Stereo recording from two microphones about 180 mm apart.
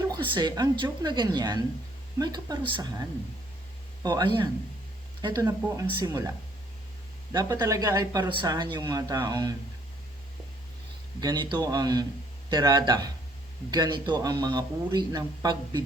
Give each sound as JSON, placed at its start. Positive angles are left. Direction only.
{"t": 0.1, "sound": "speech", "side_deg": -25}
{"t": 4.0, "sound": "speech", "side_deg": -20}
{"t": 7.3, "sound": "speech", "side_deg": -20}
{"t": 11.2, "sound": "speech", "side_deg": -25}